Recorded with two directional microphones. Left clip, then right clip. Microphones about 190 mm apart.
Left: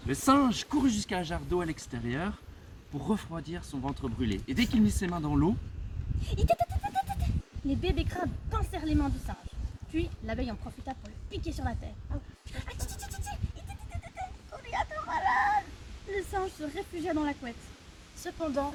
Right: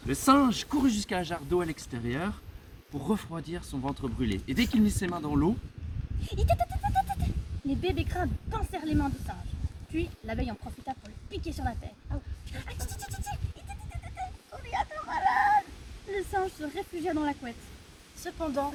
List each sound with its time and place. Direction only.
0.1 s speech: 20° right (ahead or behind)
6.2 s goat: 15° left (ahead or behind)
7.7 s speech: 15° left (ahead or behind)
12.6 s a sound: 15° left (ahead or behind)
14.7 s a sound: 15° left (ahead or behind)
16.1 s speech: 15° left (ahead or behind)
18.2 s speech: 5° left (ahead or behind)